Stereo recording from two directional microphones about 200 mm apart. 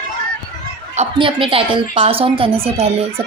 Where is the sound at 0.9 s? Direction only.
25° right (ahead or behind).